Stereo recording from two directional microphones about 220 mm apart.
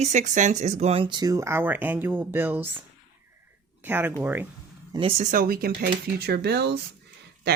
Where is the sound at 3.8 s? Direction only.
10° right (ahead or behind).